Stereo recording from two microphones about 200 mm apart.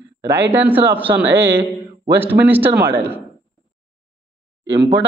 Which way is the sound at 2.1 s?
10° right (ahead or behind).